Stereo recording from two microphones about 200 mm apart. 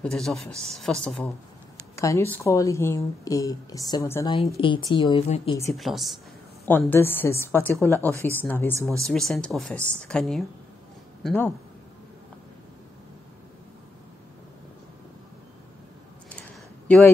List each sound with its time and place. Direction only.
0.0 s a woman's voice: centre (ahead or behind); by 5.6 s 25° left (ahead or behind)
5.8 s speech: centre (ahead or behind)
6.6 s a woman's voice: 10° left (ahead or behind)
16.3 s a sound: 5° left (ahead or behind)